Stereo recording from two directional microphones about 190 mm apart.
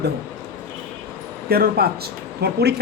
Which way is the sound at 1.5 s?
55° right (ahead or behind).